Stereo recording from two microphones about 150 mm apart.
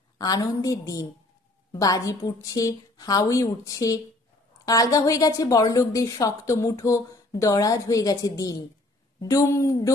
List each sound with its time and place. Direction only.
0.2 s a woman's voice: 25° left (ahead or behind)